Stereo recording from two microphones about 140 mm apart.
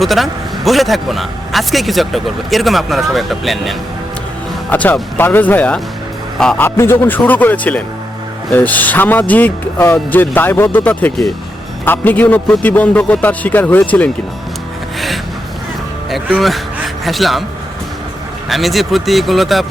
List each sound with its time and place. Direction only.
0.0 s a man's voice: centre (ahead or behind)
4.7 s a man's voice: 10° left (ahead or behind)
6.7 s speech: 20° left (ahead or behind)
14.9 s gasp: centre (ahead or behind)
16.0 s speech: centre (ahead or behind)
18.4 s a man's voice: centre (ahead or behind)